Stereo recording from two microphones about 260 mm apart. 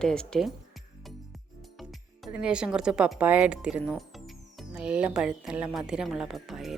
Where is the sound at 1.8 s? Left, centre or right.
Centre.